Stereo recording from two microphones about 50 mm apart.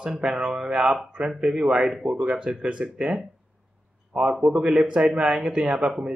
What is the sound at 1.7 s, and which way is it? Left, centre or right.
Mantra, centre.